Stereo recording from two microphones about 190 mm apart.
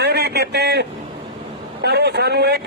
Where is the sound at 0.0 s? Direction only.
60° right (ahead or behind).